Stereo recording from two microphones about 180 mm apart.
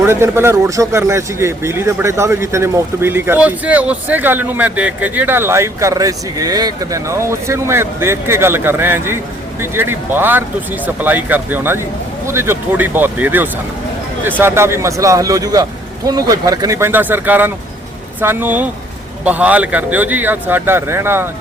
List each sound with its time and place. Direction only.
0.0 s speech: 15° right (ahead or behind)